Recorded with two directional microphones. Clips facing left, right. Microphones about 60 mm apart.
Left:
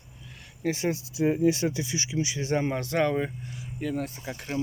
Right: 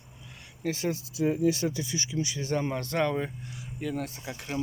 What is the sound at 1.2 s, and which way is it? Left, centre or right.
Speech, left.